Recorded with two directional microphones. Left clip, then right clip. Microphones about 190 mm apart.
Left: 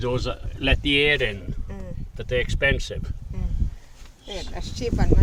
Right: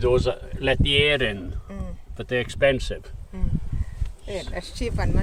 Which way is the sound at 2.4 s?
5° left (ahead or behind).